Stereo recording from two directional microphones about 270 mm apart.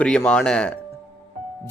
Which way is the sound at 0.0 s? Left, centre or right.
Centre.